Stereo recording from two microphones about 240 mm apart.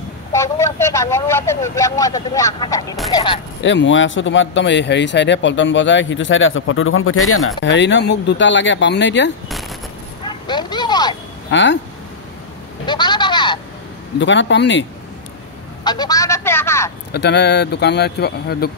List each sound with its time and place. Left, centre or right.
0.3 s speech: centre
3.6 s speech: left
10.2 s bow-wow: centre
11.5 s speech: left
12.8 s a sound: centre
14.1 s speech: left
15.8 s a sound: centre
17.1 s speech: left